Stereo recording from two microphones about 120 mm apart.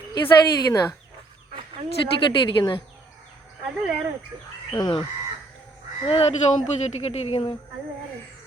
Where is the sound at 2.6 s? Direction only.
40° left (ahead or behind).